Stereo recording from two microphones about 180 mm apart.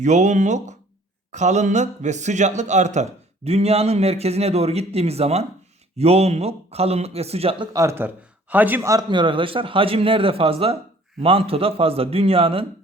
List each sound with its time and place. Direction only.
0.0 s speech: 40° right (ahead or behind)
7.7 s a man's voice: 15° right (ahead or behind)